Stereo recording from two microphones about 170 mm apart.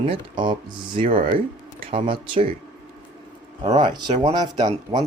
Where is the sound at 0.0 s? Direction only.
30° right (ahead or behind).